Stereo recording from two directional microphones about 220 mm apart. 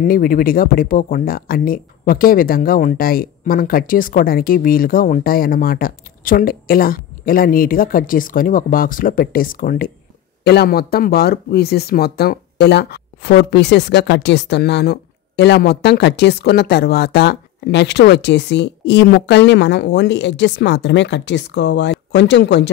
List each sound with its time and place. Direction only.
0.0 s speech: 40° left (ahead or behind)